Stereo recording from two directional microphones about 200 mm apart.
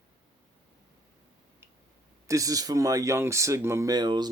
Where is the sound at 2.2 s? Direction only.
15° right (ahead or behind).